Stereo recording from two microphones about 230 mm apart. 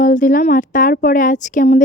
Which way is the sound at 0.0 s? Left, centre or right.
Left.